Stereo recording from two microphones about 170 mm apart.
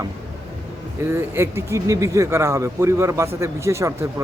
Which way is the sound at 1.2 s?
15° right (ahead or behind).